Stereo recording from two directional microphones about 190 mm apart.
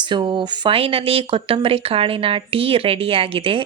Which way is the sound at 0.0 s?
25° right (ahead or behind).